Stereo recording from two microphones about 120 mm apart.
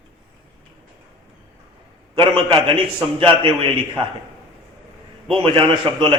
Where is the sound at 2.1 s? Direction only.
45° right (ahead or behind).